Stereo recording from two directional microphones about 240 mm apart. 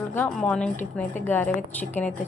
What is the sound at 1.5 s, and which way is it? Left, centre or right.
Speech, left.